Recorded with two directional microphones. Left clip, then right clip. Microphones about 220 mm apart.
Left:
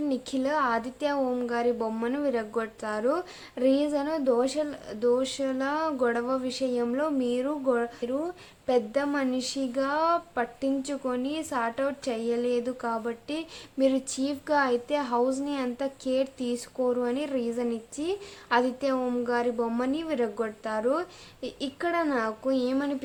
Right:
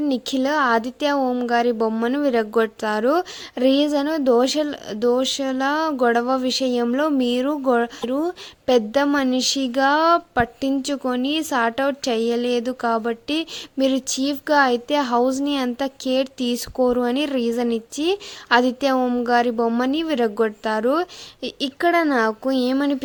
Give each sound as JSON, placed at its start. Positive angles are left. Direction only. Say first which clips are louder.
{"t": 0.0, "sound": "a woman's voice", "louder": "right 7 dB", "side_deg": -35}